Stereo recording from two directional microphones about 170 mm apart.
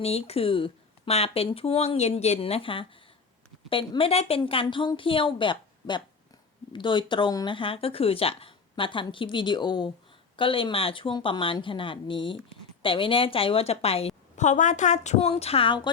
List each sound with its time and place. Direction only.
0.0 s speech: 35° left (ahead or behind)
14.3 s speech: 45° left (ahead or behind); by 15.9 s 30° left (ahead or behind)